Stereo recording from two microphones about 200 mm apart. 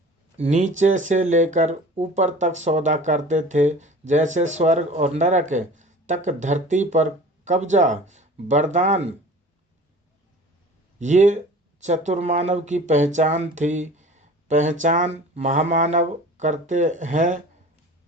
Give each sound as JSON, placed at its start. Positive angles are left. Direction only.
{"t": 0.3, "sound": "speech", "side_deg": -35}
{"t": 11.0, "sound": "speech", "side_deg": -35}